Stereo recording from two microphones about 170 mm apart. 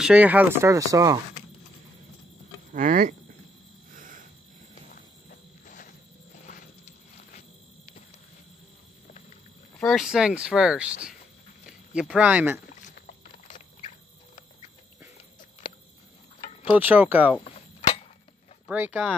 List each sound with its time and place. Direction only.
0.0 s speech: 10° right (ahead or behind)
2.7 s speech: 50° right (ahead or behind)
3.9 s cricket: 50° right (ahead or behind)
5.7 s cricket: 50° left (ahead or behind)
9.8 s speech: centre (ahead or behind)
12.8 s rodents: 45° left (ahead or behind)
15.6 s a sound: 25° left (ahead or behind)
16.7 s speech: 10° right (ahead or behind)
17.4 s a sound: 35° left (ahead or behind)
18.7 s speech: 10° right (ahead or behind)